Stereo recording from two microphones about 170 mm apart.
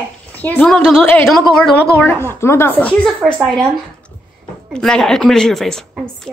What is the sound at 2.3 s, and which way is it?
Speech, 15° left (ahead or behind).